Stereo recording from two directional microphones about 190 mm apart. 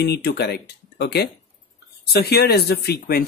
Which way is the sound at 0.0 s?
60° left (ahead or behind).